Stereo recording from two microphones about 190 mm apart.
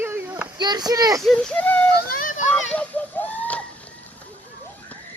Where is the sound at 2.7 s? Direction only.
10° left (ahead or behind).